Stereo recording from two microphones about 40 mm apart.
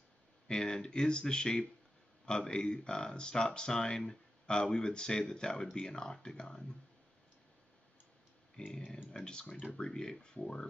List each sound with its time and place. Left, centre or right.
0.5 s speech: centre
8.5 s speech: left